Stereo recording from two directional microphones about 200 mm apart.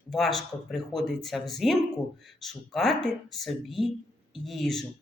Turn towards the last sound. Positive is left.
turn(degrees=0)  # may be behind; listen again after turning